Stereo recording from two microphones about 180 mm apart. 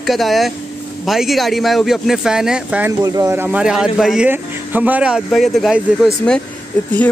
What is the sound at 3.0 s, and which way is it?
A man's voice, 20° right (ahead or behind).